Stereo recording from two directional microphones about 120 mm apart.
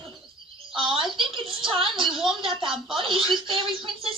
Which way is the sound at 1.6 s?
45° right (ahead or behind).